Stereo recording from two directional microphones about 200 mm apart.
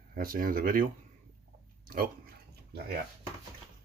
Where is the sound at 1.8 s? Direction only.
45° right (ahead or behind).